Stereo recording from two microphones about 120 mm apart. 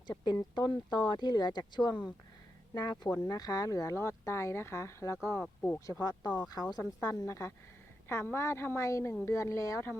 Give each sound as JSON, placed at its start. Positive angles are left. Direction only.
{"t": 0.5, "sound": "speech", "side_deg": 35}
{"t": 5.8, "sound": "speech", "side_deg": 30}